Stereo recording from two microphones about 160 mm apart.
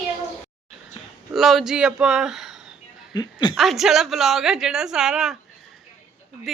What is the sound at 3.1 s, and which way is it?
Speech, 25° left (ahead or behind).